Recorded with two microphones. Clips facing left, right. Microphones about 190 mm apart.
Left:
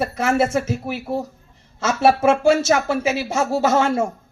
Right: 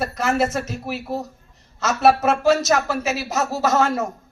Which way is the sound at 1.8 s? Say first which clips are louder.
Left 1 dB; 30° left (ahead or behind).